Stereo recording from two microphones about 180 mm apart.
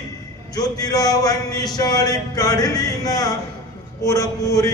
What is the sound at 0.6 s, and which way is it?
Speech, 20° left (ahead or behind).